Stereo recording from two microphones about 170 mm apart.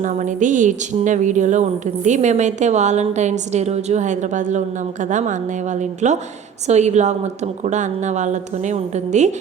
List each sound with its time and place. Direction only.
0.0 s a woman's voice: 45° right (ahead or behind)